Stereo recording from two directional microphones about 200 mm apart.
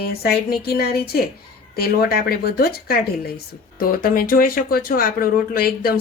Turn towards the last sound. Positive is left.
turn(degrees=50)  # may be behind; listen again after turning